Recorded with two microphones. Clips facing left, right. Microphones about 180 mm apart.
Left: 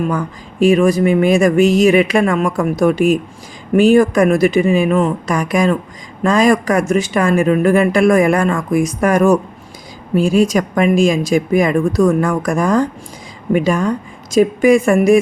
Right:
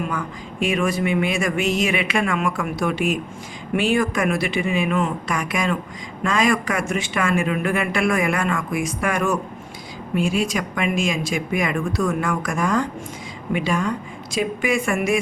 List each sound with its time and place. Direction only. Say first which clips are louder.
0.6 s speech: left 10 dB; 35° left (ahead or behind)